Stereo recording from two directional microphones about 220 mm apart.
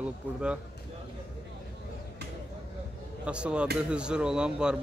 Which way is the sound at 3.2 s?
5° right (ahead or behind).